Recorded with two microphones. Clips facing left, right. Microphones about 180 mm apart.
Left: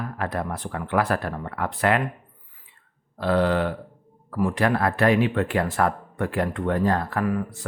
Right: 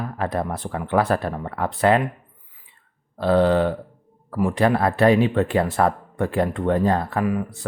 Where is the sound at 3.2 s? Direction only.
30° right (ahead or behind).